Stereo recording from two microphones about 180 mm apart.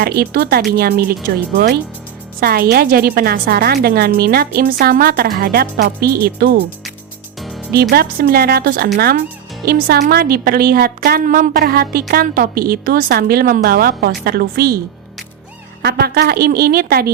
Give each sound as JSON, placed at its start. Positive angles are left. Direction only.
{"t": 0.0, "sound": "a woman's voice", "side_deg": -60}
{"t": 2.4, "sound": "a woman's voice", "side_deg": -60}
{"t": 7.7, "sound": "a woman's voice", "side_deg": -60}
{"t": 15.8, "sound": "a woman's voice", "side_deg": -60}